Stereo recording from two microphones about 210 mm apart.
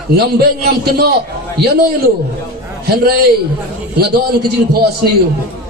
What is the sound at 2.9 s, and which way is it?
Speech, 50° right (ahead or behind).